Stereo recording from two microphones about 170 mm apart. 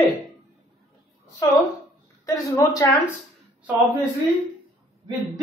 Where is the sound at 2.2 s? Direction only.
20° left (ahead or behind).